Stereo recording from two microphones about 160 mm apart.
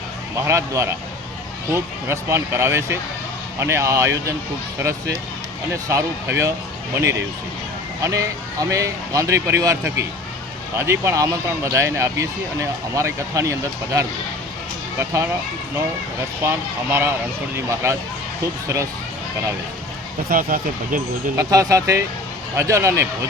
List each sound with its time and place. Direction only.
0.4 s speech: 20° right (ahead or behind)
8.0 s speech: 20° right (ahead or behind)
16.4 s speech: 15° right (ahead or behind)
20.3 s speech: 60° right (ahead or behind)
21.3 s speech: 20° right (ahead or behind)